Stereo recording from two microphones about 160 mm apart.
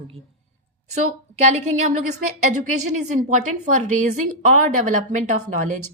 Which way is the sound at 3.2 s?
50° right (ahead or behind).